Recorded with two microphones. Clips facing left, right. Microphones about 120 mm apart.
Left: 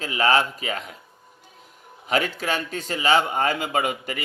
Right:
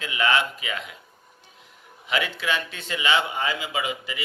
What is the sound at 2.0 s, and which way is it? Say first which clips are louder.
A man's voice: left 3 dB; 40° left (ahead or behind).